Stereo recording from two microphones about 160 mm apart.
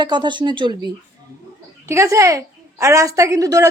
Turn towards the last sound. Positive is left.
turn(degrees=-20)  # may be behind; listen again after turning